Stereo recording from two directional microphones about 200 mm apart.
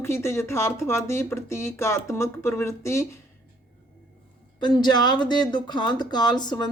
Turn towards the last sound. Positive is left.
turn(degrees=20)  # may be behind; listen again after turning